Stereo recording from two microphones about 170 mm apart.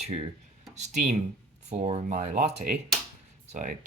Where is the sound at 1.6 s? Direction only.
35° right (ahead or behind).